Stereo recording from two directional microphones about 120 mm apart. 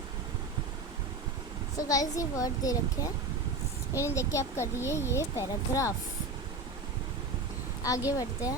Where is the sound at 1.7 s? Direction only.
30° left (ahead or behind).